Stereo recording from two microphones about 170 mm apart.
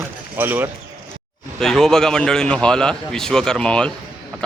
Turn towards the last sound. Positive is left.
turn(degrees=5)  # may be behind; listen again after turning